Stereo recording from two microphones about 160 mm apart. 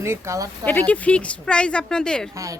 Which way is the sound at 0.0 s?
15° right (ahead or behind).